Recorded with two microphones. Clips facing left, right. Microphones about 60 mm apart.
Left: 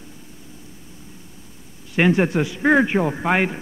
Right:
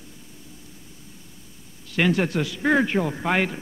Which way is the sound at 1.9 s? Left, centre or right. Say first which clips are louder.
Left 4 dB; left.